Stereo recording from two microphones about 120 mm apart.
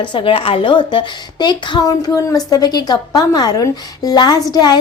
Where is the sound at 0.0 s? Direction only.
45° left (ahead or behind).